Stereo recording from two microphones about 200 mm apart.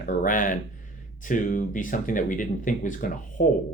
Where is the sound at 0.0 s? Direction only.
45° left (ahead or behind).